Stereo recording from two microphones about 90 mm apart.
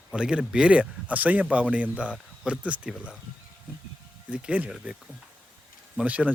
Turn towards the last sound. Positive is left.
turn(degrees=-15)  # may be behind; listen again after turning